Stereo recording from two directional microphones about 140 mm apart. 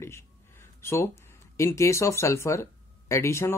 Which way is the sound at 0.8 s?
20° left (ahead or behind).